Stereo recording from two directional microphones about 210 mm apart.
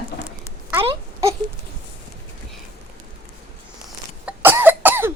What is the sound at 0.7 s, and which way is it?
Wail, 15° right (ahead or behind).